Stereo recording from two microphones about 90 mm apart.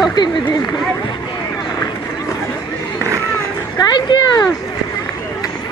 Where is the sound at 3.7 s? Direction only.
55° left (ahead or behind).